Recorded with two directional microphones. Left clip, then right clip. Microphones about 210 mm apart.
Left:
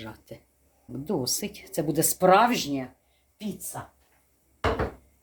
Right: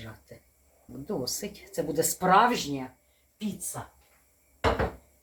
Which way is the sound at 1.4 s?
50° left (ahead or behind).